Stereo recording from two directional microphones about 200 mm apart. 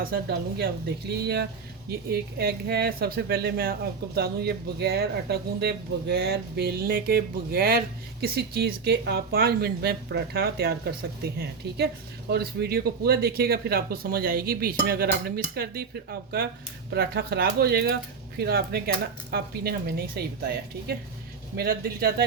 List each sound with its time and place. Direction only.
0.0 s speech: 50° right (ahead or behind)